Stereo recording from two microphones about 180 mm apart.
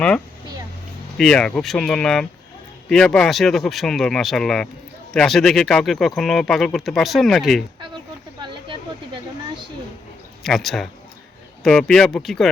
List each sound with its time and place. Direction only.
1.2 s speech: 5° left (ahead or behind)
8.4 s a sound: 25° right (ahead or behind)
10.4 s speech: centre (ahead or behind)